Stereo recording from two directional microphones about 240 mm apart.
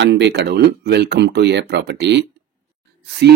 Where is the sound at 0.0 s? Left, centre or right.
Right.